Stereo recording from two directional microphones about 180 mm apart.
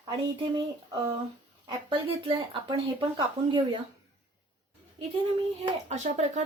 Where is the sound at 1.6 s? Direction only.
30° right (ahead or behind).